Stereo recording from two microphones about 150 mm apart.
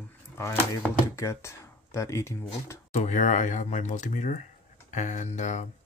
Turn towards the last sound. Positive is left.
turn(degrees=50)  # may be behind; listen again after turning